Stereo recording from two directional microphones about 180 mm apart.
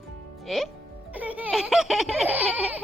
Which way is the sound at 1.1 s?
10° right (ahead or behind).